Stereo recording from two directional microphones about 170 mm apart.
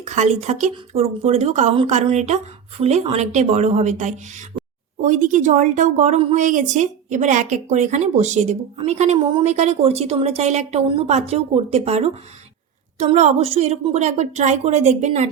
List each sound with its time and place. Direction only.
0.0 s a woman's voice: 40° right (ahead or behind)